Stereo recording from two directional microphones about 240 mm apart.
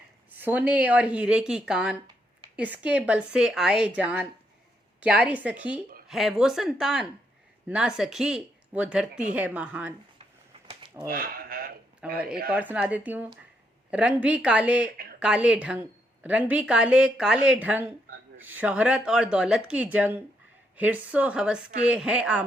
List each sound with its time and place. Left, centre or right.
0.3 s a woman's voice: centre
10.7 s a sound: right
11.1 s sheep: right
12.0 s a woman's voice: centre